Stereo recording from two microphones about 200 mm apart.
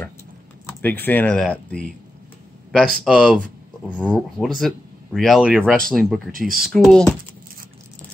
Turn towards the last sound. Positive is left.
turn(degrees=0)  # may be behind; listen again after turning